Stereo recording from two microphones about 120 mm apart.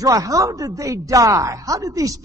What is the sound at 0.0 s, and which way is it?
A man's voice, 30° right (ahead or behind).